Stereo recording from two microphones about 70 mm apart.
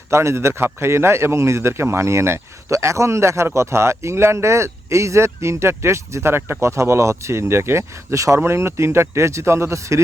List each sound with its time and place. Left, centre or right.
0.1 s a man's voice: right